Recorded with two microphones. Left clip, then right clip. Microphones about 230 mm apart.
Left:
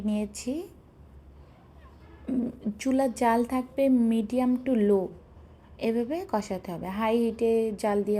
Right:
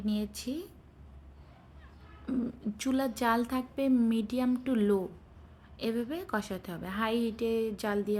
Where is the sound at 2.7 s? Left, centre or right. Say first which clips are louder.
Left 6 dB; centre.